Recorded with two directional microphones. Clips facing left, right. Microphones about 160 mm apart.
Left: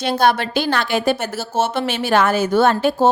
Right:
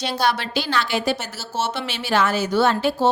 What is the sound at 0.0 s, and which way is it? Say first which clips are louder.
A woman's voice: left 5 dB; 50° left (ahead or behind).